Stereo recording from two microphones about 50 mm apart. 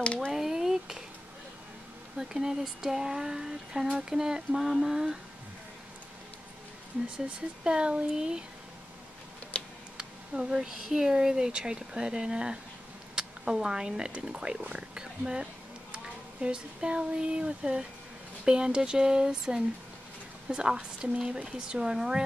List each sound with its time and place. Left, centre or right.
0.0 s speech: left
0.3 s a sound: centre
2.1 s speech: centre
4.5 s music: centre
4.8 s speech: centre
7.6 s speech: centre
9.9 s speech: centre